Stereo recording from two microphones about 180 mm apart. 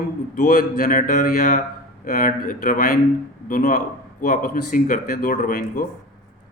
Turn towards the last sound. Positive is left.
turn(degrees=50)  # may be behind; listen again after turning